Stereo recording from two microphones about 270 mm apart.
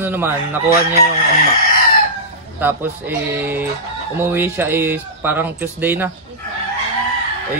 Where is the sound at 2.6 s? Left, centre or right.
Centre.